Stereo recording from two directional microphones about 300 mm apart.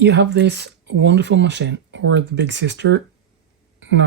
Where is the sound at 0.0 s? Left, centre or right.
Right.